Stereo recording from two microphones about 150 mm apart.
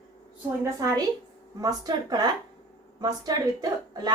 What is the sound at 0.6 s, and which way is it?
A woman's voice, 25° right (ahead or behind).